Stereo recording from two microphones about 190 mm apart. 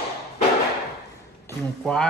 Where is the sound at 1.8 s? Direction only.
5° left (ahead or behind).